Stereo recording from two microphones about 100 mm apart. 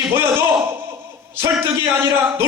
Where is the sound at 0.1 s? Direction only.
25° right (ahead or behind).